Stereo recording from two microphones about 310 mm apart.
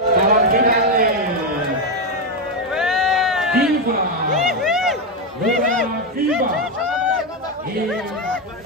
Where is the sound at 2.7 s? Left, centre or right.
Centre.